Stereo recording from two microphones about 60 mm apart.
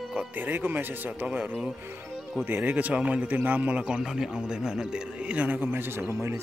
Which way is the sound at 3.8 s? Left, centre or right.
Centre.